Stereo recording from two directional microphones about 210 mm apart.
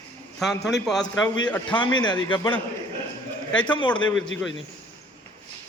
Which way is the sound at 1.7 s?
20° left (ahead or behind).